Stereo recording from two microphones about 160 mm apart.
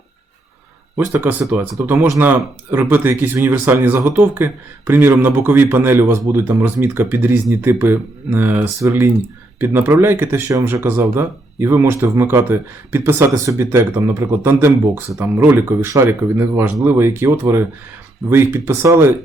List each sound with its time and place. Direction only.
0.9 s speech: 10° right (ahead or behind)